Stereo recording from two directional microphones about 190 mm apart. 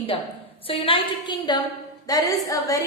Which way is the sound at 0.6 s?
30° left (ahead or behind).